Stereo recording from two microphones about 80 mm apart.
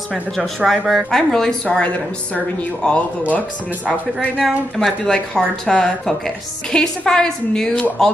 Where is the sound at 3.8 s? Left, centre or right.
Centre.